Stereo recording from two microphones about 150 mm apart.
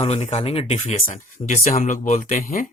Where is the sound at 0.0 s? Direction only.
45° left (ahead or behind).